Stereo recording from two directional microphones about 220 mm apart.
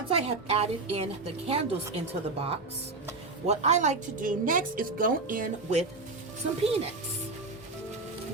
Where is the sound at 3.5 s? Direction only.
30° right (ahead or behind).